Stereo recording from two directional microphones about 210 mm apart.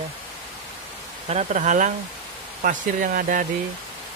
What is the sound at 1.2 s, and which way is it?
Speech, 35° right (ahead or behind).